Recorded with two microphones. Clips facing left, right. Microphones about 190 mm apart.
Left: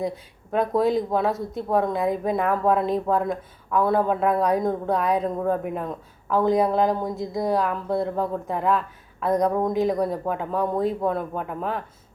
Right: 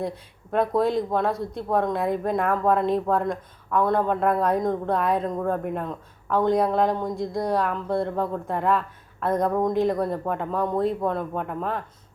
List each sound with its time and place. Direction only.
0.0 s speech: centre (ahead or behind)